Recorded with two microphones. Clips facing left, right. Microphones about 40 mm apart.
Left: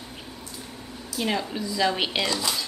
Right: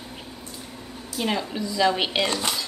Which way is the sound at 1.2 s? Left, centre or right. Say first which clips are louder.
Right 1 dB; centre.